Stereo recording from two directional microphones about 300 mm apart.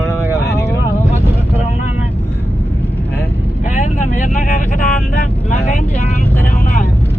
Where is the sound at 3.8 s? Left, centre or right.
Left.